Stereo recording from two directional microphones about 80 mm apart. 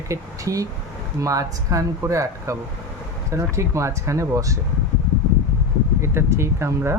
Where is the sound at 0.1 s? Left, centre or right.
Right.